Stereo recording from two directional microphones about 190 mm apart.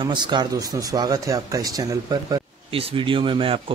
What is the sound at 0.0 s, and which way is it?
Speech, 25° right (ahead or behind).